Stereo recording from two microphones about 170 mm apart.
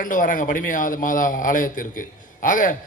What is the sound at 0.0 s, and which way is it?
A man's voice, 55° left (ahead or behind).